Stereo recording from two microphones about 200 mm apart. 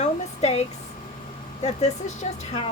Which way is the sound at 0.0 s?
35° left (ahead or behind).